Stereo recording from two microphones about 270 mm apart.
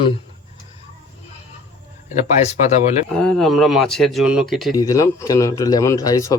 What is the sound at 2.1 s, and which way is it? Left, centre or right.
Speech, left.